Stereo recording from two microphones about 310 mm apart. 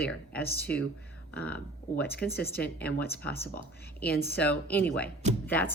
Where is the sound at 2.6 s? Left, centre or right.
Centre.